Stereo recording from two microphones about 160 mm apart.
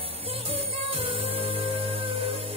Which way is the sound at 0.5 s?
35° right (ahead or behind).